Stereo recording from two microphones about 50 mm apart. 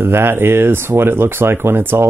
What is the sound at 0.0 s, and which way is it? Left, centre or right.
Speech, right.